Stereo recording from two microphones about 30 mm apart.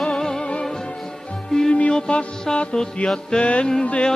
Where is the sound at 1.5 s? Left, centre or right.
Centre.